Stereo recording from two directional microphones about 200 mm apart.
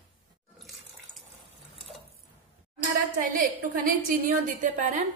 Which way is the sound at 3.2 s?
45° right (ahead or behind).